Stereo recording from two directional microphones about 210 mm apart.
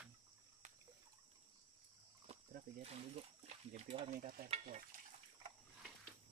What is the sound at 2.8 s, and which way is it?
Speech, 30° right (ahead or behind).